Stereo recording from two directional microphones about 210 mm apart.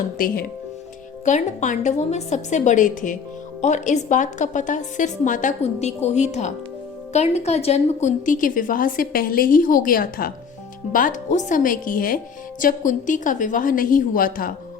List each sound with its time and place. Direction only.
1.2 s a woman's voice: 35° left (ahead or behind)